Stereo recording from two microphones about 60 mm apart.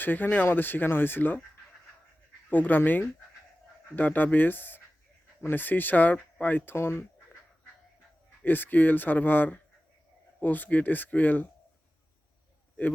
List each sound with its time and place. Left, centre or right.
0.0 s speech: left
2.5 s speech: left
6.7 s speech: left
8.4 s speech: left